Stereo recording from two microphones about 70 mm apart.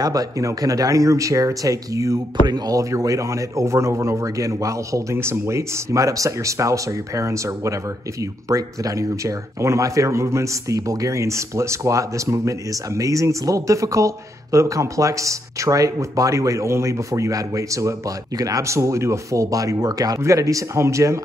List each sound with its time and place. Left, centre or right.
0.0 s speech: right
5.1 s speech: right
20.2 s speech: right